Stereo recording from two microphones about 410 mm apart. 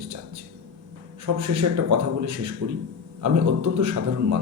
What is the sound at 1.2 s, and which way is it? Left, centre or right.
Speech, right.